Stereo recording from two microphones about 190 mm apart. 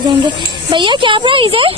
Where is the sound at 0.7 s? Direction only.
25° right (ahead or behind).